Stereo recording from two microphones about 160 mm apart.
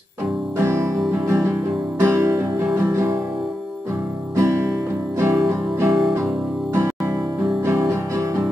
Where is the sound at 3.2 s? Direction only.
Centre (ahead or behind).